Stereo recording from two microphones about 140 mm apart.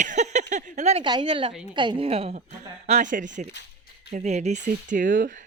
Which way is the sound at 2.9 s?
60° right (ahead or behind).